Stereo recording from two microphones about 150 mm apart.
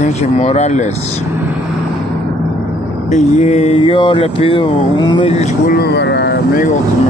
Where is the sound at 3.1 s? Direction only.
45° left (ahead or behind); by 5.3 s 30° left (ahead or behind).